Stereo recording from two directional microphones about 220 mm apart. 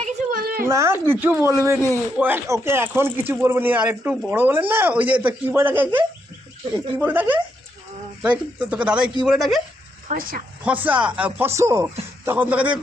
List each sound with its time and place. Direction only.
0.0 s a sound: 40° right (ahead or behind)
0.6 s speech: 10° right (ahead or behind)
10.1 s speech: 40° right (ahead or behind)
10.6 s speech: 5° right (ahead or behind)